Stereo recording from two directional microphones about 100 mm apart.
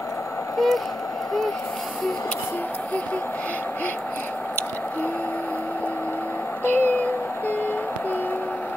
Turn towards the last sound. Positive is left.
turn(degrees=20)  # may be behind; listen again after turning